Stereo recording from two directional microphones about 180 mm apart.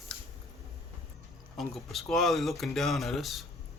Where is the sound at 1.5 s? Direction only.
Centre (ahead or behind).